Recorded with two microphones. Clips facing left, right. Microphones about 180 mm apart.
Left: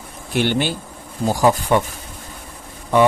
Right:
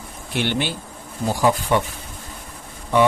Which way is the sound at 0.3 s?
45° left (ahead or behind).